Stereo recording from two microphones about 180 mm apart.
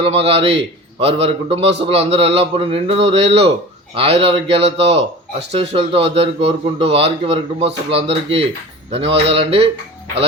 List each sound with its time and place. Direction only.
0.0 s speech: 35° right (ahead or behind)